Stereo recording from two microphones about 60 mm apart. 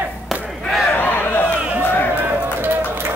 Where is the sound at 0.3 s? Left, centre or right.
Centre.